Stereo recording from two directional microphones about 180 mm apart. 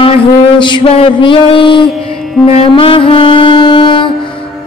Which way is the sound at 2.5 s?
30° left (ahead or behind).